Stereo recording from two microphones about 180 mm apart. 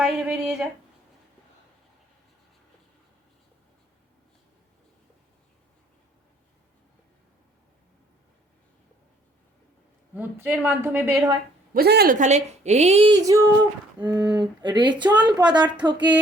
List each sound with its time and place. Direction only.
0.0 s speech: centre (ahead or behind)
10.2 s speech: 10° right (ahead or behind)
11.7 s speech: 60° right (ahead or behind)
12.1 s a woman's voice: 40° right (ahead or behind); by 16.0 s 25° right (ahead or behind)